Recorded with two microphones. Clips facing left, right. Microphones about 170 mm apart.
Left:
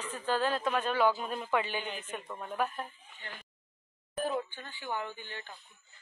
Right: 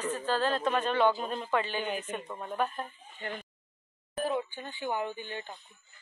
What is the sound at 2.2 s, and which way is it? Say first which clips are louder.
Speech: right 2 dB; 10° right (ahead or behind).